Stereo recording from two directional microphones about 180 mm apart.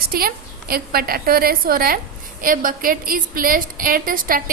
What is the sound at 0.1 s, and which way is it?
A woman's voice, 55° right (ahead or behind).